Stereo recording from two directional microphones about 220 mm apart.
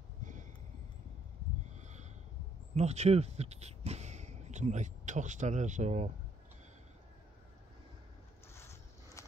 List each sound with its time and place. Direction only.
0.2 s a sound: 35° right (ahead or behind)
1.8 s snort: 30° right (ahead or behind)
2.7 s speech: 30° right (ahead or behind)
8.5 s boat: 10° left (ahead or behind)